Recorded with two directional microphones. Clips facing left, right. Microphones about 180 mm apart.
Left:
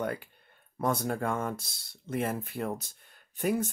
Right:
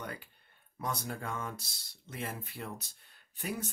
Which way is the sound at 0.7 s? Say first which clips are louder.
Left 9 dB; 55° left (ahead or behind).